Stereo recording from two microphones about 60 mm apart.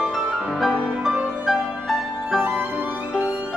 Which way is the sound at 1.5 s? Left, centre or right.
Centre.